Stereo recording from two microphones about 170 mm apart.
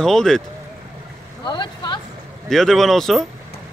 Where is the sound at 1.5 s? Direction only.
25° left (ahead or behind).